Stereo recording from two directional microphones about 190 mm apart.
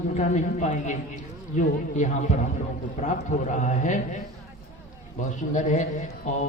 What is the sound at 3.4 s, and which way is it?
Speech, 40° left (ahead or behind).